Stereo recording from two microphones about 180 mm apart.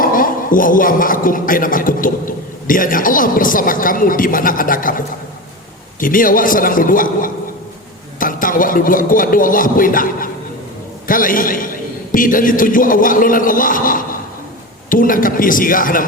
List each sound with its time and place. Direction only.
0.0 s a man's voice: 50° left (ahead or behind)